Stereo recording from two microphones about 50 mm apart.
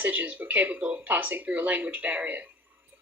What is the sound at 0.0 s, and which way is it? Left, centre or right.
A woman's voice, right.